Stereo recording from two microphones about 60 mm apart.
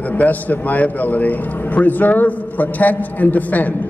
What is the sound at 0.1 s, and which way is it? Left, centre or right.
A man's voice, left.